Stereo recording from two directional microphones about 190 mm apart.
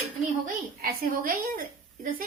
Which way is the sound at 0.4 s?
45° right (ahead or behind).